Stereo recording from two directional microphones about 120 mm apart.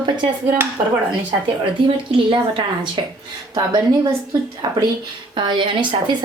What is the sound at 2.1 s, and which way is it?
Speech, 45° right (ahead or behind).